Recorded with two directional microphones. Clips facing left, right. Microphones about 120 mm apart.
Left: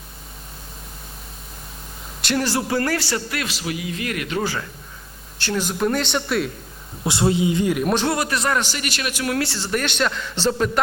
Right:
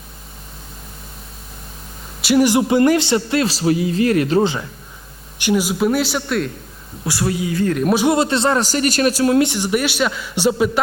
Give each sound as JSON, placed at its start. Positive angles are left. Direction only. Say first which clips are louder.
{"t": 2.2, "sound": "speech", "louder": "right 8 dB", "side_deg": -10}
{"t": 5.4, "sound": "a man's voice", "louder": "right 5 dB", "side_deg": -10}
{"t": 7.0, "sound": "a woman's voice", "louder": "left 2 dB", "side_deg": 25}
{"t": 7.7, "sound": "a man's voice", "louder": "right 3 dB", "side_deg": 5}
{"t": 8.1, "sound": "speech", "louder": "right 6 dB", "side_deg": -25}
{"t": 8.6, "sound": "a man's voice", "louder": "right 11 dB", "side_deg": -40}